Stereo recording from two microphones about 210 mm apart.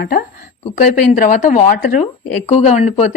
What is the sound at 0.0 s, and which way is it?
Speech, 45° left (ahead or behind).